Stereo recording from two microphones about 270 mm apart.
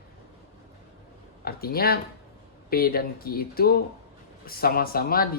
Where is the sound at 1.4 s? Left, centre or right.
Left.